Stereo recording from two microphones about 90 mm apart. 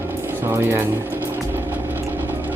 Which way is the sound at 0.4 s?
25° right (ahead or behind).